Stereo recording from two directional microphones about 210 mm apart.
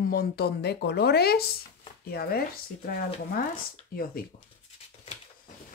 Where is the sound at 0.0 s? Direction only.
45° left (ahead or behind).